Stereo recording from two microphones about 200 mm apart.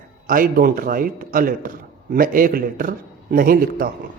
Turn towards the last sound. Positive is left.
turn(degrees=-45)  # may be behind; listen again after turning